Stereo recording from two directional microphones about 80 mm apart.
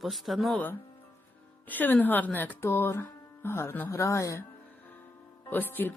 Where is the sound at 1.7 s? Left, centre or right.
Left.